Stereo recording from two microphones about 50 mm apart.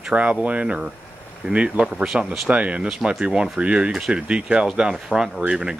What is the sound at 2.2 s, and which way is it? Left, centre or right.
Speech, right.